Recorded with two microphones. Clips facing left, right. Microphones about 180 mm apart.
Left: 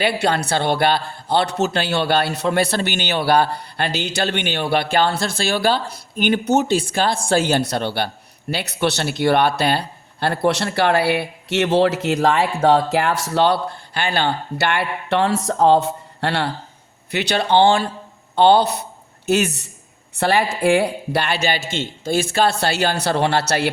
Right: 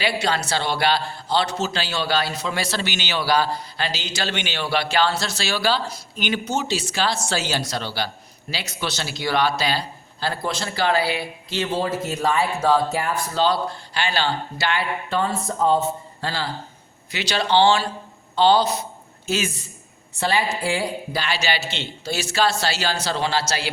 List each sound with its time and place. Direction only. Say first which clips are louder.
0.0 s a man's voice: left 4 dB; 55° left (ahead or behind)
17.1 s a man's voice: left 4 dB; 60° left (ahead or behind)
20.1 s a man's voice: left 4 dB; 55° left (ahead or behind)